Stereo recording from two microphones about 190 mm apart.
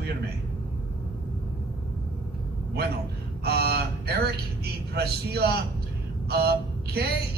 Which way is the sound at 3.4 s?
55° right (ahead or behind).